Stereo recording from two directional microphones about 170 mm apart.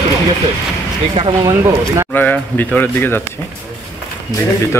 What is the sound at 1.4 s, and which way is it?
Speech, 20° right (ahead or behind).